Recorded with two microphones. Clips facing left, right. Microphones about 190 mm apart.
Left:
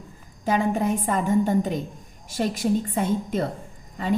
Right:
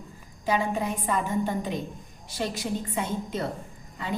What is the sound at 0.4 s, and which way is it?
A woman's voice, 50° left (ahead or behind).